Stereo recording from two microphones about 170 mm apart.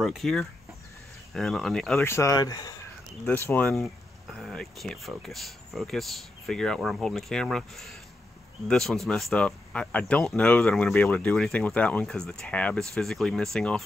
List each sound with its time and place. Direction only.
0.0 s speech: centre (ahead or behind)
2.0 s speech: 15° left (ahead or behind)